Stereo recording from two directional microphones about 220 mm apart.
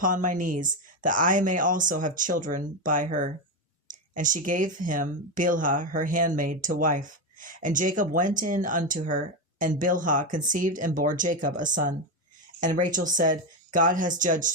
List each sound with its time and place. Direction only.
0.0 s speech: 35° right (ahead or behind)